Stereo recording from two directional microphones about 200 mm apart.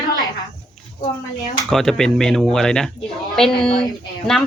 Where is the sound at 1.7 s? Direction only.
Centre (ahead or behind).